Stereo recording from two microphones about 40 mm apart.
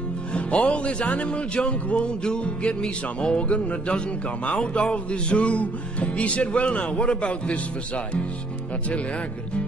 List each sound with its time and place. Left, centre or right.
0.3 s speech: left